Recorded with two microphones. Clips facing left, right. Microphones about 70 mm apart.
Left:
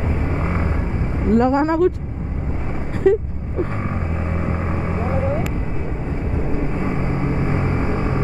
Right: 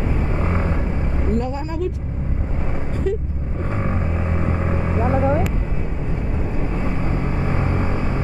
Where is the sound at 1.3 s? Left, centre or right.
Left.